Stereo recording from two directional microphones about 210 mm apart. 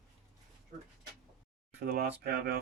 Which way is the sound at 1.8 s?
45° right (ahead or behind).